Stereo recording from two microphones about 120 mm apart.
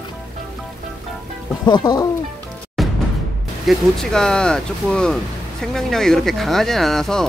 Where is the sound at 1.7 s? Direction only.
35° left (ahead or behind).